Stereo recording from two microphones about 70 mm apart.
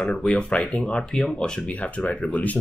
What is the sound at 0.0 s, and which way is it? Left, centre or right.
Speech, centre.